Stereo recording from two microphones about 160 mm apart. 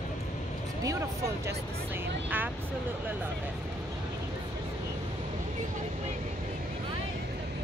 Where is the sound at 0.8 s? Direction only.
20° right (ahead or behind).